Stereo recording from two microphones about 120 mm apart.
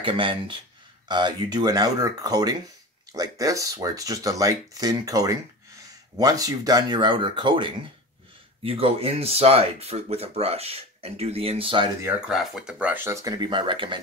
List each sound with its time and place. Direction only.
0.0 s speech: 50° right (ahead or behind)
12.3 s speech: 5° right (ahead or behind); by 13.3 s 20° right (ahead or behind)
13.4 s speech: 40° right (ahead or behind)